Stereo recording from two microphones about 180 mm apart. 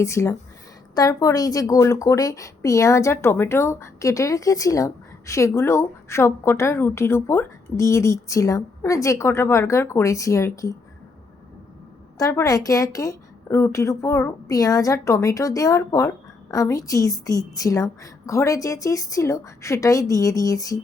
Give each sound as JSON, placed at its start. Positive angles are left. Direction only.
{"t": 0.0, "sound": "a woman's voice", "side_deg": 15}
{"t": 12.1, "sound": "a woman's voice", "side_deg": 15}